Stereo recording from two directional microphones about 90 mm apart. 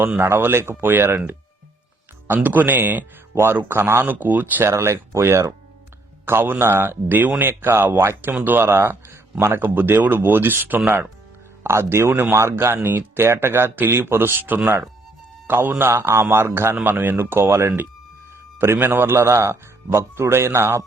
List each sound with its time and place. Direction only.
0.2 s a man's voice: 25° right (ahead or behind)
4.7 s a man's voice: 30° right (ahead or behind)